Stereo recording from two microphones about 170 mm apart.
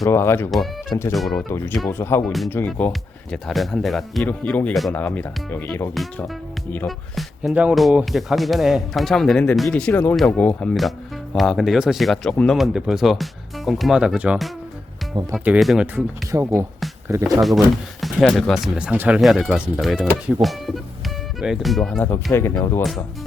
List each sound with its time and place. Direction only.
0.0 s speech: 15° left (ahead or behind)
2.2 s speech: centre (ahead or behind)
2.5 s speech: 10° left (ahead or behind)
5.9 s speech: centre (ahead or behind)
16.3 s speech: 20° right (ahead or behind)
18.0 s speech: centre (ahead or behind); by 22.8 s 15° left (ahead or behind)